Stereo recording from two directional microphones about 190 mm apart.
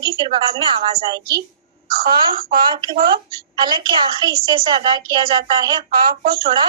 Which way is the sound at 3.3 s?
20° right (ahead or behind).